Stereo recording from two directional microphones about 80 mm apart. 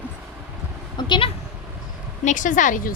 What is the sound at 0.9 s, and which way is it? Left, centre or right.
Bleat, left.